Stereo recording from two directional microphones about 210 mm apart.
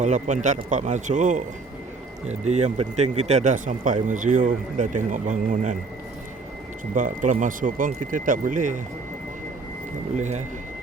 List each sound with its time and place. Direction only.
0.0 s speech: 35° right (ahead or behind)
6.9 s speech: 40° right (ahead or behind)
10.2 s speech: 35° right (ahead or behind)